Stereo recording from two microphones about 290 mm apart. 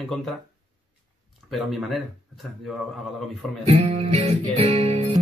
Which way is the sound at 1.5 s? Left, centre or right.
Centre.